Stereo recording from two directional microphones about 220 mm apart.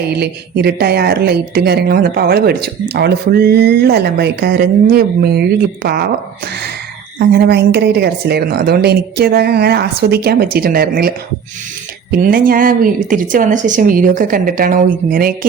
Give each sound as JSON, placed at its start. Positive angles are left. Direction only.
{"t": 0.2, "sound": "speech", "side_deg": -45}
{"t": 7.3, "sound": "speech", "side_deg": -45}
{"t": 12.2, "sound": "speech", "side_deg": -40}